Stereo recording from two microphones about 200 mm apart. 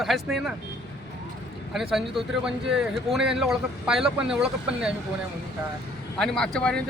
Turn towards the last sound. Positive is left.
turn(degrees=5)  # may be behind; listen again after turning